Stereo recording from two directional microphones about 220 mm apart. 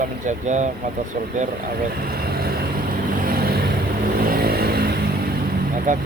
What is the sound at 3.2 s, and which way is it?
Vehicle, 40° right (ahead or behind).